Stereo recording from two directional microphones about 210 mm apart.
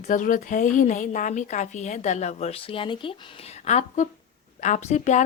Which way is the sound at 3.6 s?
35° left (ahead or behind).